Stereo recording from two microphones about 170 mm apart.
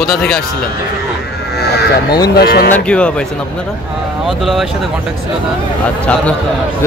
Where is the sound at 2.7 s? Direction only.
5° left (ahead or behind).